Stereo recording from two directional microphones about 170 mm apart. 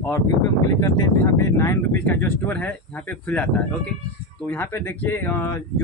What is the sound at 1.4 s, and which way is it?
Speech, 15° left (ahead or behind).